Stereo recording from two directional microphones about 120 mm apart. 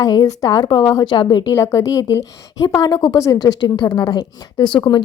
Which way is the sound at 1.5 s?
25° left (ahead or behind).